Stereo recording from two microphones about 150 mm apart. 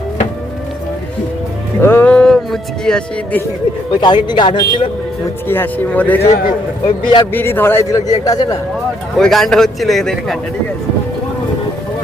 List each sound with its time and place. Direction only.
1.8 s speech: 15° left (ahead or behind)
3.9 s speech: 30° left (ahead or behind)
5.5 s speech: 10° left (ahead or behind)
6.8 s speech: 35° left (ahead or behind)
7.3 s a man's voice: 15° left (ahead or behind)
9.1 s a man's voice: centre (ahead or behind)